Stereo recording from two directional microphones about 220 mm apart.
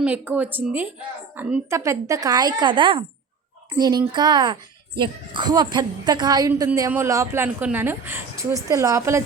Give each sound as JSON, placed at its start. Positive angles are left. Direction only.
{"t": 0.0, "sound": "a woman's voice", "side_deg": -5}